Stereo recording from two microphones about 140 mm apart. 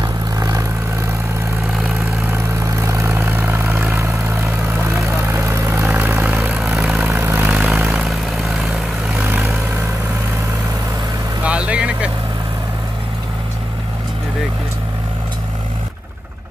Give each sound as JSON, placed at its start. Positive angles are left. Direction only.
{"t": 0.0, "sound": "vehicle", "side_deg": -25}
{"t": 2.3, "sound": "vehicle", "side_deg": -20}
{"t": 7.1, "sound": "vehicle", "side_deg": -20}
{"t": 9.2, "sound": "vehicle", "side_deg": -10}
{"t": 11.4, "sound": "vehicle", "side_deg": -10}